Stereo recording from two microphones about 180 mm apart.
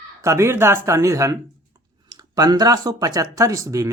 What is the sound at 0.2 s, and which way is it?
Speech, 15° right (ahead or behind).